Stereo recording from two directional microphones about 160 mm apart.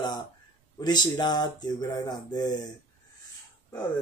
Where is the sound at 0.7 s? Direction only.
25° left (ahead or behind).